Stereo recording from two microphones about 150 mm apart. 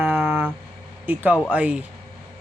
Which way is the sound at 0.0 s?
10° right (ahead or behind).